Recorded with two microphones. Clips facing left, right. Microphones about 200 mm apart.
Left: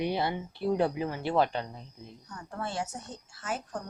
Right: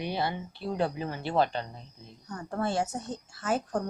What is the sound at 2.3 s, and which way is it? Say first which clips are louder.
A woman's voice: right 6 dB; 45° right (ahead or behind).